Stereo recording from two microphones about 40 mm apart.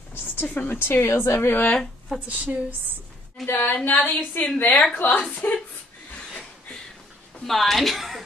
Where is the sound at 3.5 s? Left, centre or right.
Left.